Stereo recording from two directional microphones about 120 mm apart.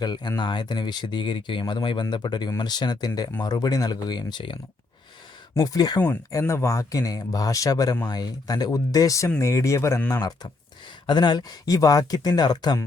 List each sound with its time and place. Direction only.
0.0 s a man's voice: 35° left (ahead or behind)